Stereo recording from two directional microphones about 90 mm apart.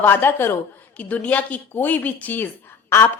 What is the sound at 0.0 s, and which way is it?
A woman's voice, 25° left (ahead or behind).